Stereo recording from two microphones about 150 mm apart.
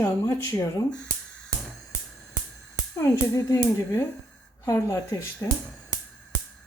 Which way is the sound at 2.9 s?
20° left (ahead or behind).